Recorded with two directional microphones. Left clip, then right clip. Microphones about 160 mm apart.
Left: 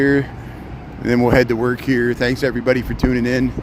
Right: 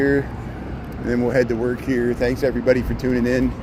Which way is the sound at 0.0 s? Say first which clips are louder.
Left 3 dB; 50° left (ahead or behind).